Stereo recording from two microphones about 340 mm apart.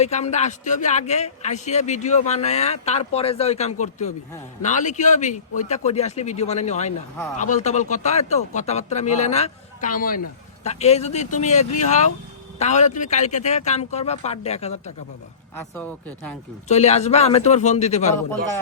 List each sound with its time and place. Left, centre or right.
0.0 s a man's voice: centre
15.7 s speech: centre
16.6 s a man's voice: centre